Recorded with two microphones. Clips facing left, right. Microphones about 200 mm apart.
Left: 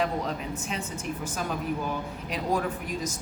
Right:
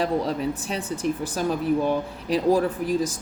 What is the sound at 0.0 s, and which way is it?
Speech, 35° right (ahead or behind).